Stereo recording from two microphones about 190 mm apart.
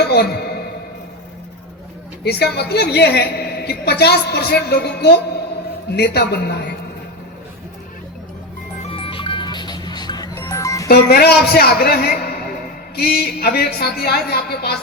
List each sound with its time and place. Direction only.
0.0 s a sound: 55° left (ahead or behind)
2.2 s a woman's voice: 60° left (ahead or behind)
8.8 s music: 30° left (ahead or behind)
10.8 s a man's voice: 55° left (ahead or behind)